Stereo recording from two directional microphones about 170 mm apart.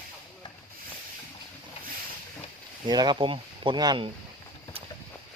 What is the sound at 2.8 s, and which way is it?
Speech, 25° right (ahead or behind).